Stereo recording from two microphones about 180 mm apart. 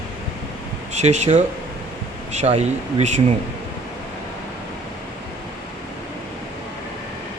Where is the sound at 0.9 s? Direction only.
40° right (ahead or behind).